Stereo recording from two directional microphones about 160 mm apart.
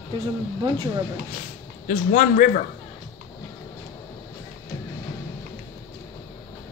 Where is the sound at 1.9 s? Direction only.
50° left (ahead or behind).